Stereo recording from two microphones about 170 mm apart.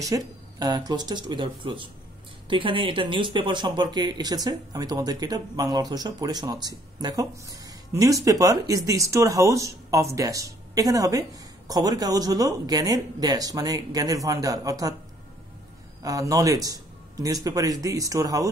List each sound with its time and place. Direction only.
0.0 s speech: 20° right (ahead or behind)
16.0 s speech: 20° right (ahead or behind)